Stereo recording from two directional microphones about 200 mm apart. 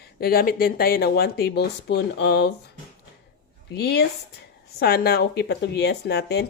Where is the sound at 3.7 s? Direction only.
55° left (ahead or behind).